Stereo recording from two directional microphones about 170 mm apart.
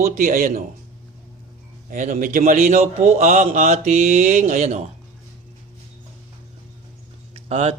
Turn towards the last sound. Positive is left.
turn(degrees=-35)  # may be behind; listen again after turning